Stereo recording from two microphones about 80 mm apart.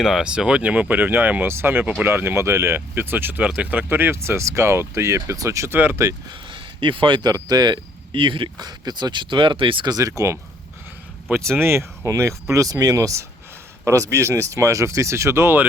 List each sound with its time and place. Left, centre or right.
0.0 s speech: centre; by 6.1 s right
6.5 s a sound: right
7.3 s speech: right
10.1 s speech: right
11.3 s speech: right